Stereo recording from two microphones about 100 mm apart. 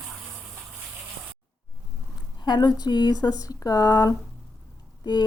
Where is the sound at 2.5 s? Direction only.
45° left (ahead or behind).